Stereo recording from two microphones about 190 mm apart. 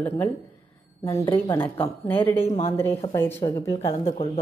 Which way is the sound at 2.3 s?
30° left (ahead or behind).